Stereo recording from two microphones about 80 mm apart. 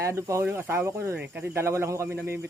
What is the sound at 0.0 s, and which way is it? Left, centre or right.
A man's voice, right.